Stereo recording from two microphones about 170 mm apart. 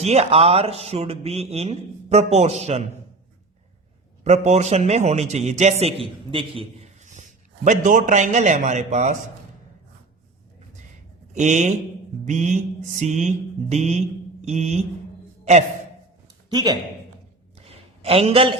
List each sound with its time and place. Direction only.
0.0 s speech: 40° right (ahead or behind)
4.2 s a man's voice: 40° right (ahead or behind)
11.3 s a man's voice: 45° right (ahead or behind)
16.5 s a man's voice: 25° right (ahead or behind)
17.7 s a sound: 35° right (ahead or behind)